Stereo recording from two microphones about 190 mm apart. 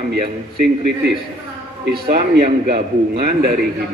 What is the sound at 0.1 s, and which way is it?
A man's voice, 60° right (ahead or behind).